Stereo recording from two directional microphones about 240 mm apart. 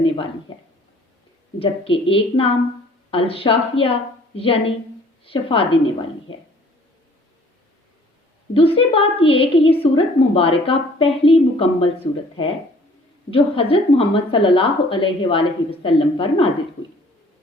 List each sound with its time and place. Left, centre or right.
1.5 s a woman's voice: left
8.5 s a woman's voice: left